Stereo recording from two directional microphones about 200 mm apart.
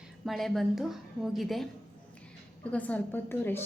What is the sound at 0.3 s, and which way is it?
A woman's voice, centre (ahead or behind).